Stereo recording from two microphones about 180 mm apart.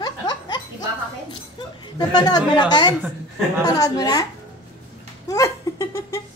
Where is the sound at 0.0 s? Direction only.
25° left (ahead or behind).